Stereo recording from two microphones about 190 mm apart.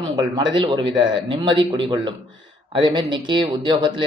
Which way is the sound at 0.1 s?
25° right (ahead or behind).